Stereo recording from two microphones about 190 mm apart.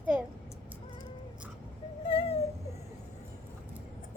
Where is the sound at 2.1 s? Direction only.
30° left (ahead or behind).